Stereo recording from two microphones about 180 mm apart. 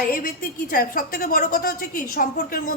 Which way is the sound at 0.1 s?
55° left (ahead or behind).